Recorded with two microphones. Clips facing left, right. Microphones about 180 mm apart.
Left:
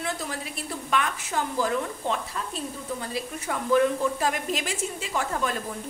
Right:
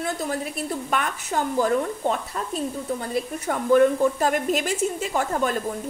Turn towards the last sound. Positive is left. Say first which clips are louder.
# right 4 dB
turn(degrees=-45)  # may be behind; listen again after turning